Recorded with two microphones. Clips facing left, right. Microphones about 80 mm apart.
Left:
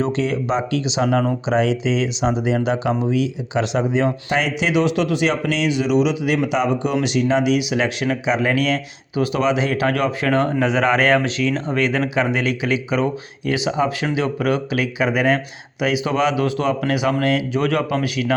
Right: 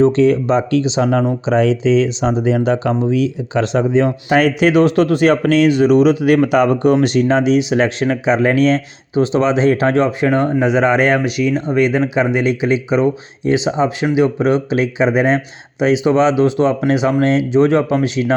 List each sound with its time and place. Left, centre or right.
0.0 s speech: right
4.3 s speech: right